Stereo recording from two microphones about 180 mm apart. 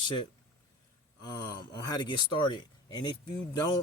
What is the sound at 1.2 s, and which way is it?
Speech, 20° left (ahead or behind).